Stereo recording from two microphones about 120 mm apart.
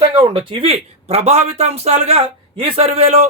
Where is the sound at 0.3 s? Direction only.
45° right (ahead or behind).